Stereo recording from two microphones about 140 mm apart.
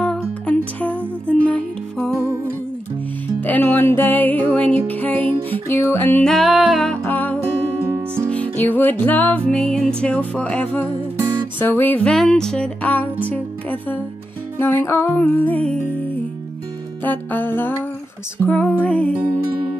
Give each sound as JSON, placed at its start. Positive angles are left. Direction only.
{"t": 0.0, "sound": "music", "side_deg": 10}
{"t": 3.3, "sound": "music", "side_deg": 15}
{"t": 6.2, "sound": "music", "side_deg": 0}
{"t": 7.1, "sound": "music", "side_deg": 15}
{"t": 7.8, "sound": "music", "side_deg": -15}
{"t": 8.3, "sound": "music", "side_deg": 10}
{"t": 17.0, "sound": "music", "side_deg": 15}